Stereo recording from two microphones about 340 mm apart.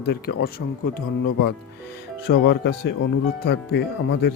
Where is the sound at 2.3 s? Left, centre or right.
Left.